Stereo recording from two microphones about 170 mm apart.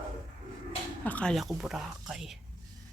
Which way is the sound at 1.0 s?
5° left (ahead or behind).